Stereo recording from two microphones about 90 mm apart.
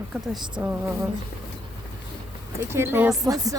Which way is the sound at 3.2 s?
40° right (ahead or behind).